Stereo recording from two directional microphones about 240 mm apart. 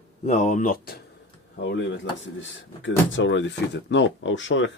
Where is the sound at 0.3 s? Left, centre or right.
Left.